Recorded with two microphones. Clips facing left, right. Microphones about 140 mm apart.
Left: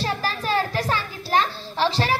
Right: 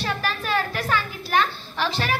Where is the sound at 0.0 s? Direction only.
35° left (ahead or behind).